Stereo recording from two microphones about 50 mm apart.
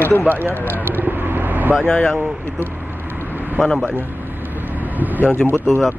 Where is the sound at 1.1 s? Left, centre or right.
Right.